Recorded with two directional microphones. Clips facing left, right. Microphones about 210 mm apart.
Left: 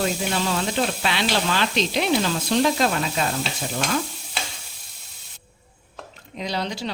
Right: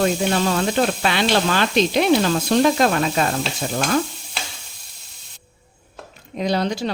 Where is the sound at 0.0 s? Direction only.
50° right (ahead or behind).